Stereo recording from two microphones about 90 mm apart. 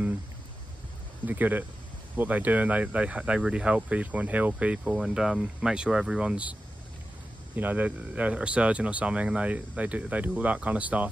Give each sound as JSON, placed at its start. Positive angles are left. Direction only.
{"t": 1.2, "sound": "speech", "side_deg": -20}
{"t": 7.5, "sound": "speech", "side_deg": -20}